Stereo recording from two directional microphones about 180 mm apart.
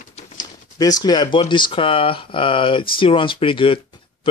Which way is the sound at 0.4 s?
20° left (ahead or behind).